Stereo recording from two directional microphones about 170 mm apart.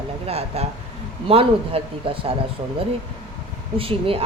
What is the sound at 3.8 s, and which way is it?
Speech, 35° right (ahead or behind).